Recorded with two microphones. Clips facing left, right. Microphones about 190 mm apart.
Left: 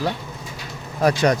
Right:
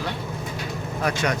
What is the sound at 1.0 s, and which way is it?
Speech, 35° left (ahead or behind).